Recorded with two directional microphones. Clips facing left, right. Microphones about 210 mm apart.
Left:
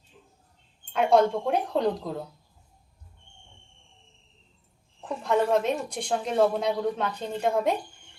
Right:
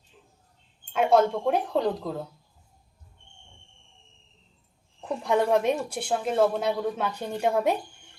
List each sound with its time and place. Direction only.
0.9 s speech: centre (ahead or behind)
4.9 s speech: 10° right (ahead or behind)